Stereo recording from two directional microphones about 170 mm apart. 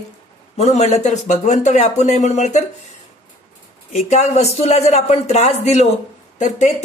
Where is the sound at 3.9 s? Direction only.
40° left (ahead or behind).